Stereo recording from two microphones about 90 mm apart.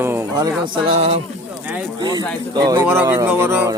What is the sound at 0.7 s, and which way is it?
Speech, 90° right.